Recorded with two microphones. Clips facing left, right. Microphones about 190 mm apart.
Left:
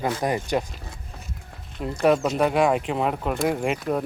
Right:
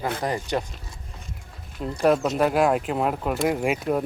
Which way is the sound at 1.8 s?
Centre (ahead or behind).